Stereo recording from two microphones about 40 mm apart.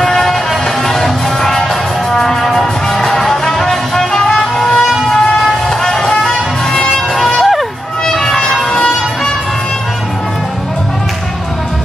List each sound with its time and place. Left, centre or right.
0.0 s music: centre